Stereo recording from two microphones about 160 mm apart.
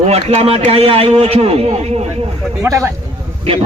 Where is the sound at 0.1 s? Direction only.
40° right (ahead or behind).